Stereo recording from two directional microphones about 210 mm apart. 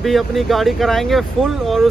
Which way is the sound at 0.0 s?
Centre (ahead or behind).